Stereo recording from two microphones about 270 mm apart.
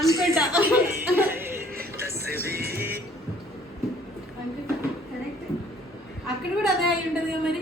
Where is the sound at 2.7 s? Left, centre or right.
Centre.